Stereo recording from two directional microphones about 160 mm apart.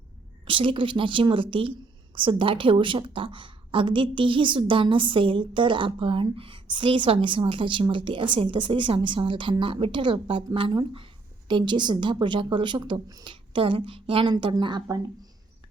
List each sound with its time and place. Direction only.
0.4 s a woman's voice: 35° right (ahead or behind)